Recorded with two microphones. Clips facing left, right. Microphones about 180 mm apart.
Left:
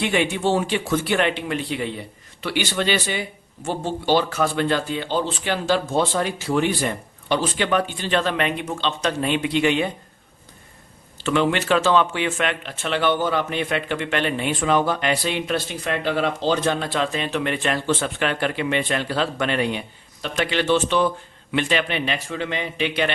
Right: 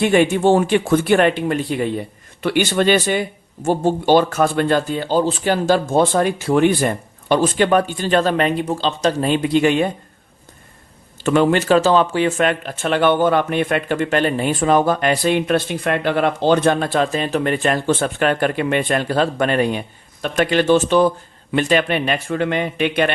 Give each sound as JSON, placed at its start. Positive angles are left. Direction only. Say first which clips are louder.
{"t": 0.0, "sound": "speech", "louder": "right 7 dB", "side_deg": -45}
{"t": 11.2, "sound": "speech", "louder": "right 5 dB", "side_deg": -45}